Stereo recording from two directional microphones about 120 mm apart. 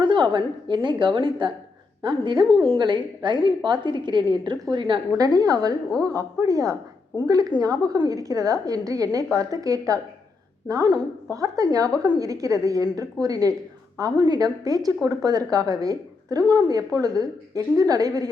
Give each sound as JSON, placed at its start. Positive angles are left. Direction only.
{"t": 0.0, "sound": "a woman's voice", "side_deg": -40}